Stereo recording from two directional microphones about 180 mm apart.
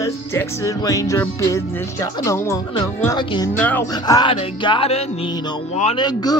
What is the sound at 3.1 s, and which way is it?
Music, 25° left (ahead or behind).